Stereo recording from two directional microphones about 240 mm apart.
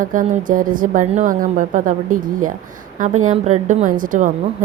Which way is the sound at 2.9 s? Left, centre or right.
Right.